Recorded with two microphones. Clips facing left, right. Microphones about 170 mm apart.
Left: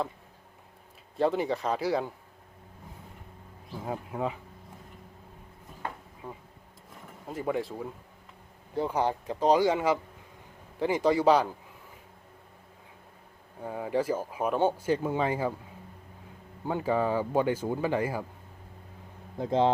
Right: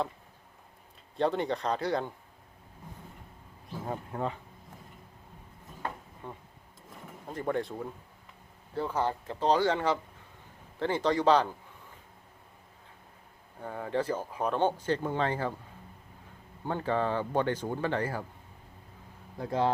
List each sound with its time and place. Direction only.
1.1 s speech: 5° left (ahead or behind)
3.8 s speech: 5° left (ahead or behind)
6.2 s speech: 5° left (ahead or behind)
8.7 s speech: 15° left (ahead or behind)
13.6 s speech: 10° left (ahead or behind)
16.6 s speech: 10° left (ahead or behind)
19.4 s speech: 20° left (ahead or behind)